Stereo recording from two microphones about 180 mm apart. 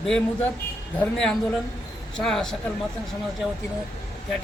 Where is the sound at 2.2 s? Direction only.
Centre (ahead or behind).